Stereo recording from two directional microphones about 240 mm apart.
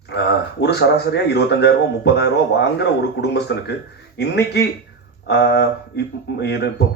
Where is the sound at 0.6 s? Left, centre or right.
Left.